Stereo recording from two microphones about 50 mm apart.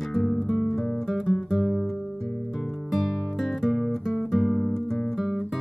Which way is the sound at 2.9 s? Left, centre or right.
Centre.